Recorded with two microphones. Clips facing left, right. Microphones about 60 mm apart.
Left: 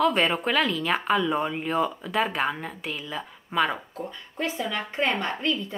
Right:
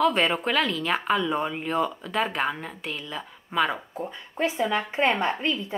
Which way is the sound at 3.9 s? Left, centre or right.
Centre.